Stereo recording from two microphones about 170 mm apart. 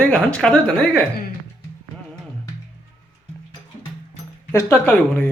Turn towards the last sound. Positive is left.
turn(degrees=10)  # may be behind; listen again after turning